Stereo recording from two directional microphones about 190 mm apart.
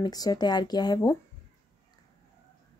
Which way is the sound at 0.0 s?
20° left (ahead or behind).